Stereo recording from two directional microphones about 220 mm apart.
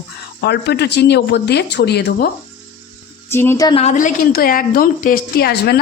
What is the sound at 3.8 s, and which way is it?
A woman's voice, 35° left (ahead or behind).